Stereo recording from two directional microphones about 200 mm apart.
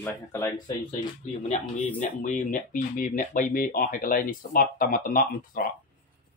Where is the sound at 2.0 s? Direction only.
40° left (ahead or behind).